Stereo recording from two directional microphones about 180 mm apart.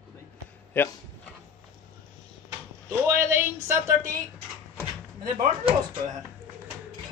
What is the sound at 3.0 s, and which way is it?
Speech, 15° right (ahead or behind).